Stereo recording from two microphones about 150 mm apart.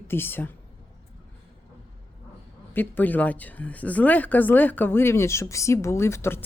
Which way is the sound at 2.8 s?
10° left (ahead or behind).